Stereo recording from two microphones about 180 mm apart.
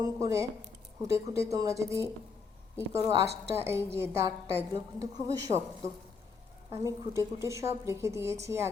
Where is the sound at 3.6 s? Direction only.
15° right (ahead or behind).